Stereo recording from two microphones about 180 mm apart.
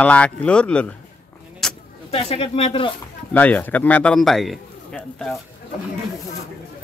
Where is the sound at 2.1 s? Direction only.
35° left (ahead or behind).